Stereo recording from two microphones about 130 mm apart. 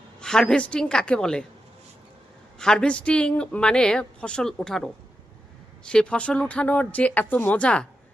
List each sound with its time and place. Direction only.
0.2 s a woman's voice: 5° left (ahead or behind)
2.6 s a woman's voice: 5° left (ahead or behind)